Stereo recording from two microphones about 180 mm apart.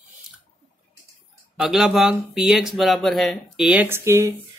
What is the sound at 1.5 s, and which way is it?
Speech, centre (ahead or behind).